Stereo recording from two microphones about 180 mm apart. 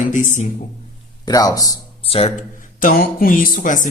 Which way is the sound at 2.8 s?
50° left (ahead or behind).